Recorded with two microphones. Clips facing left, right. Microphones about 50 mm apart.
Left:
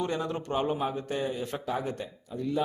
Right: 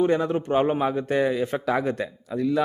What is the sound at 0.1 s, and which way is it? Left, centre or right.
A man's voice, right.